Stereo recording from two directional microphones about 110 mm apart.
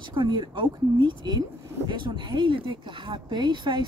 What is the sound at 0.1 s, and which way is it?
Speech, 45° right (ahead or behind).